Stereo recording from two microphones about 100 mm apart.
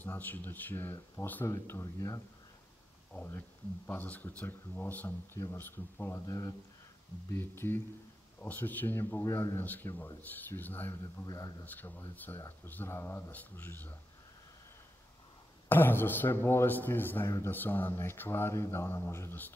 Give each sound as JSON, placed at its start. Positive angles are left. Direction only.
{"t": 0.0, "sound": "speech", "side_deg": 20}
{"t": 2.0, "sound": "speech", "side_deg": 35}
{"t": 3.3, "sound": "speech", "side_deg": 20}
{"t": 6.2, "sound": "speech", "side_deg": 35}
{"t": 7.2, "sound": "speech", "side_deg": 25}
{"t": 11.2, "sound": "speech", "side_deg": 35}
{"t": 11.6, "sound": "speech", "side_deg": 20}
{"t": 15.7, "sound": "speech", "side_deg": 20}